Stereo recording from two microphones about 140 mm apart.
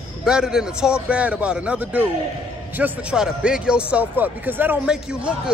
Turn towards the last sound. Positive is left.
turn(degrees=-5)  # may be behind; listen again after turning